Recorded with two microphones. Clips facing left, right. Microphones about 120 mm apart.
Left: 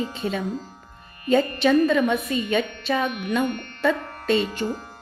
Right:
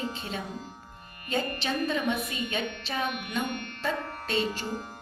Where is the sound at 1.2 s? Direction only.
65° left (ahead or behind).